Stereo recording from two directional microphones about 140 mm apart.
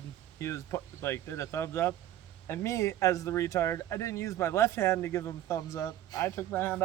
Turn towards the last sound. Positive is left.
turn(degrees=15)  # may be behind; listen again after turning